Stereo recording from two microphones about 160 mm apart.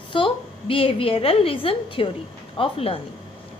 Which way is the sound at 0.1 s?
30° left (ahead or behind).